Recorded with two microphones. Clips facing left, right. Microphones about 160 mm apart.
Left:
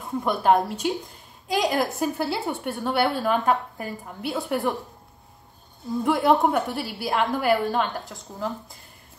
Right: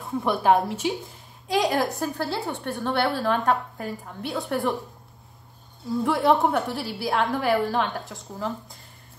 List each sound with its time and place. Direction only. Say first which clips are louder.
0.0 s a woman's voice: even; centre (ahead or behind)
6.0 s a woman's voice: left 1 dB; centre (ahead or behind)